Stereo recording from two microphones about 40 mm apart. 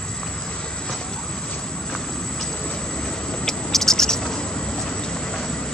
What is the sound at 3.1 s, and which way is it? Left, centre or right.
Vehicle, left.